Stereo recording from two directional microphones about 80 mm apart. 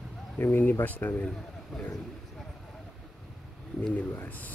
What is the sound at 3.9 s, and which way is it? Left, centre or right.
Speech, left.